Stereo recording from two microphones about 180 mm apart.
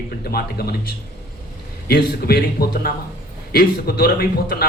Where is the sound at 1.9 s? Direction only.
60° left (ahead or behind).